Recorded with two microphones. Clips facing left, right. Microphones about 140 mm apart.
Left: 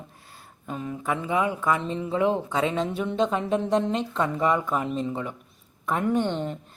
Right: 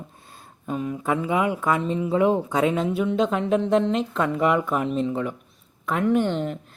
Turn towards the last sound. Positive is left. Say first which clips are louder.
# right 3 dB
turn(degrees=0)  # may be behind; listen again after turning